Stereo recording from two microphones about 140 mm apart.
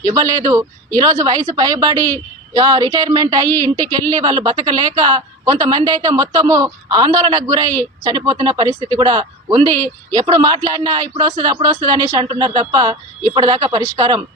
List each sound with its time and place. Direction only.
0.0 s a woman's voice: 25° right (ahead or behind)